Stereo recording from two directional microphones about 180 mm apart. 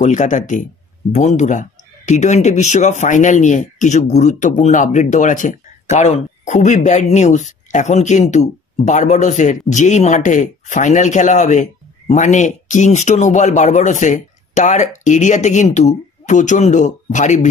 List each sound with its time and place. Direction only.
0.0 s speech: 45° left (ahead or behind)